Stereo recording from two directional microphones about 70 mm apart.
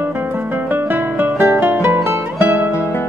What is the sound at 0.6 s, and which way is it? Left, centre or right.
Music, right.